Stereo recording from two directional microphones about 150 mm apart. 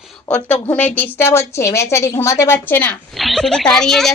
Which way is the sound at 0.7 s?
10° left (ahead or behind).